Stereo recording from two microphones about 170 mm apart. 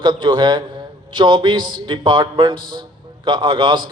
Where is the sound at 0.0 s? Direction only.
30° right (ahead or behind).